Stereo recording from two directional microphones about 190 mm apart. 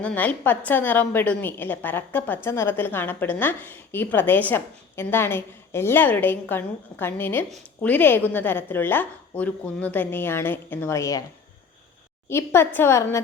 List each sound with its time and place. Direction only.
0.0 s a woman's voice: 5° left (ahead or behind)
12.3 s a woman's voice: 15° left (ahead or behind)